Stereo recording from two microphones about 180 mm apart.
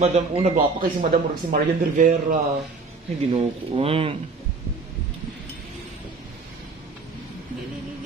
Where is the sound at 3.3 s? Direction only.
30° right (ahead or behind).